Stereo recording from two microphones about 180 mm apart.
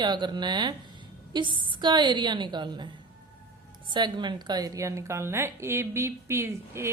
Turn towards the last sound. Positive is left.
turn(degrees=-15)  # may be behind; listen again after turning